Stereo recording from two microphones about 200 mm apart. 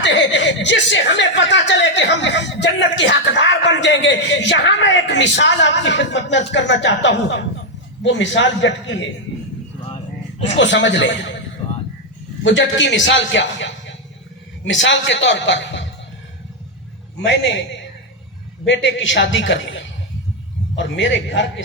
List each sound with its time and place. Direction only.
0.0 s speech: 60° left (ahead or behind)
10.6 s speech: 65° left (ahead or behind)
17.2 s a woman's voice: 65° left (ahead or behind)